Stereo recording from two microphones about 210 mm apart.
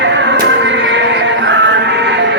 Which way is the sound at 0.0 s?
60° right (ahead or behind).